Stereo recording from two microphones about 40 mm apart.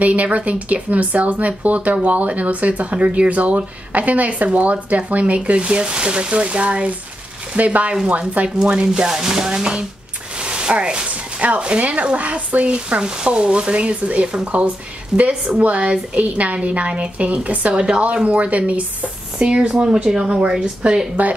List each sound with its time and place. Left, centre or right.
0.0 s speech: right
8.9 s a sound: centre
11.1 s speech: right; by 15.3 s centre
15.5 s speech: right; by 21.1 s centre